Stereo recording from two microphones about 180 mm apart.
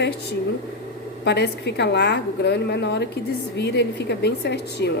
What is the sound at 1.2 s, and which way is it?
A woman's voice, 70° left (ahead or behind).